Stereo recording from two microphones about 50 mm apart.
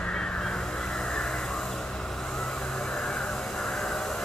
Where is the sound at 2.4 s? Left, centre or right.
Centre.